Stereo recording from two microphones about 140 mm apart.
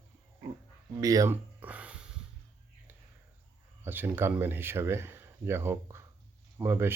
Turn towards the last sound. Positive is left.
turn(degrees=-15)  # may be behind; listen again after turning